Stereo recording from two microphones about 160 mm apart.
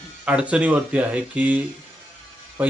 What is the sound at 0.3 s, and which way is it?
Speech, 10° right (ahead or behind).